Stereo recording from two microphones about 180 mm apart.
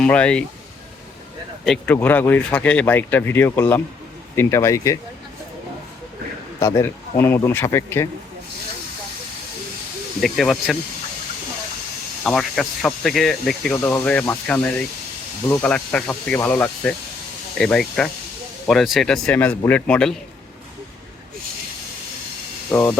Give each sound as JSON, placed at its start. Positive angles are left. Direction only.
{"t": 0.0, "sound": "speech", "side_deg": 5}
{"t": 1.6, "sound": "speech", "side_deg": 5}
{"t": 6.6, "sound": "speech", "side_deg": 15}
{"t": 10.2, "sound": "speech", "side_deg": 0}
{"t": 12.2, "sound": "speech", "side_deg": 0}
{"t": 22.7, "sound": "speech", "side_deg": 10}